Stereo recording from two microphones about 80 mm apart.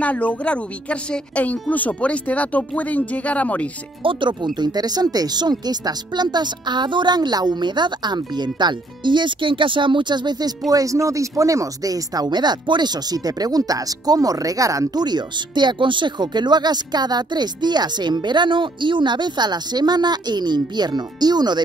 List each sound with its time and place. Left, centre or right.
0.0 s speech: centre
4.0 s speech: right
4.6 s speech: right
10.7 s speech: right
15.0 s speech: right